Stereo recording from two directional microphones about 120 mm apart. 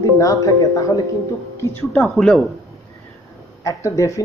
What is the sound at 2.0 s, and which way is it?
Speech, 5° left (ahead or behind).